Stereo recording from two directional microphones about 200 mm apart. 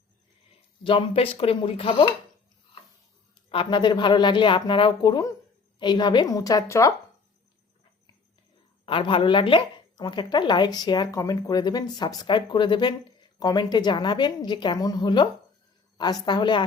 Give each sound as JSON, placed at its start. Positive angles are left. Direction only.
{"t": 0.9, "sound": "a woman's voice", "side_deg": 25}
{"t": 3.5, "sound": "a woman's voice", "side_deg": 25}
{"t": 8.9, "sound": "a woman's voice", "side_deg": 25}